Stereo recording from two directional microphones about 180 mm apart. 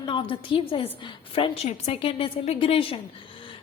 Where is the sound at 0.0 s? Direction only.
25° left (ahead or behind).